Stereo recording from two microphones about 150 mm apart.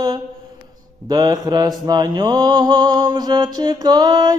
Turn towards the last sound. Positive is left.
turn(degrees=-25)  # may be behind; listen again after turning